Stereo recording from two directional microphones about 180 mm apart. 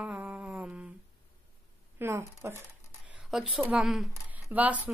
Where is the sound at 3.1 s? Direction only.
5° right (ahead or behind).